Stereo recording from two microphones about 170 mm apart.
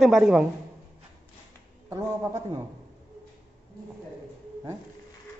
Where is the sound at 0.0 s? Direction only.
Centre (ahead or behind).